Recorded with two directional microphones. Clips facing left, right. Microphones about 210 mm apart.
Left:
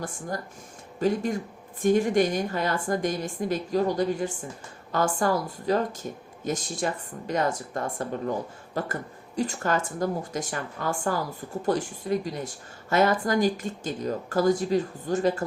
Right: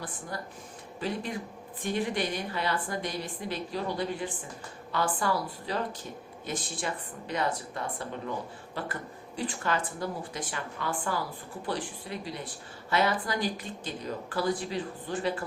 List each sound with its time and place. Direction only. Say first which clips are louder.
0.9 s speech: left 8 dB; 45° left (ahead or behind)